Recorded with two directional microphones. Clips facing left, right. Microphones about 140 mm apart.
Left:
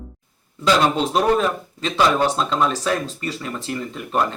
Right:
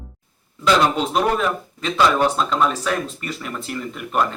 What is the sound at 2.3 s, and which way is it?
Speech, 30° left (ahead or behind).